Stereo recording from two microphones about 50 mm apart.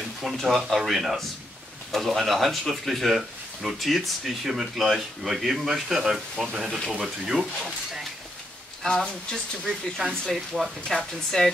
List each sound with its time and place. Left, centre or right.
0.2 s speech: centre
8.8 s speech: centre
9.9 s speech: centre